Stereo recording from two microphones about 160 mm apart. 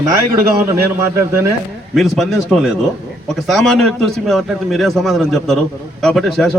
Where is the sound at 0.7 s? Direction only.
15° right (ahead or behind).